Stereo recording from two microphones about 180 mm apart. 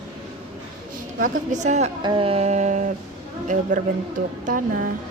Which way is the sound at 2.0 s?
30° right (ahead or behind).